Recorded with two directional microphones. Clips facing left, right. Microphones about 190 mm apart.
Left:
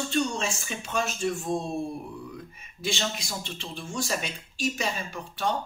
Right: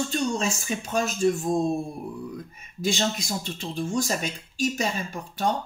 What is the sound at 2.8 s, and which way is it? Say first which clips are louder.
Speech: right 5 dB; 45° right (ahead or behind).